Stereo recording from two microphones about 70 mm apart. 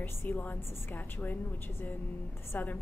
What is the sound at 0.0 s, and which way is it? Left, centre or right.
A woman's voice, left.